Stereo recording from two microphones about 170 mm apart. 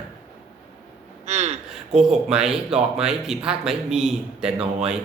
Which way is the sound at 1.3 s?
40° right (ahead or behind).